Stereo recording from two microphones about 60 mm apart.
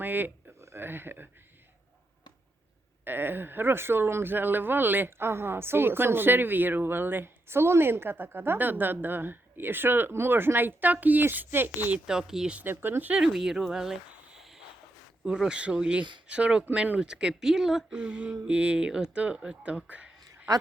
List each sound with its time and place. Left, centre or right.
0.0 s speech: right
3.0 s speech: right
12.0 s speech: centre
12.6 s speech: right
13.1 s speech: centre